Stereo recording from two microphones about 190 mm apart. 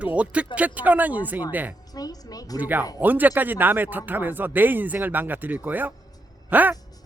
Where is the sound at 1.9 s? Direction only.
20° left (ahead or behind).